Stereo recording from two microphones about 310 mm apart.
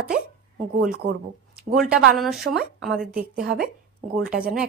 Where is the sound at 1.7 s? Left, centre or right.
Centre.